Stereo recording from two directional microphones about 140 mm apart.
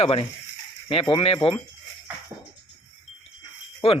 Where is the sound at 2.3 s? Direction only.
45° right (ahead or behind).